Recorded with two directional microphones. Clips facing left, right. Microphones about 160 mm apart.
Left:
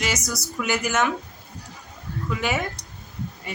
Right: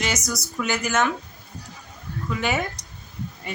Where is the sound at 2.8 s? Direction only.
20° right (ahead or behind).